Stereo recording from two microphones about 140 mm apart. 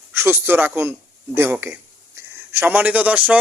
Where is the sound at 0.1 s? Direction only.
15° right (ahead or behind).